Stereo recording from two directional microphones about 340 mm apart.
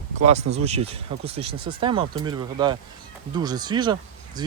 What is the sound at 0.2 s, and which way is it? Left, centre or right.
Speech, centre.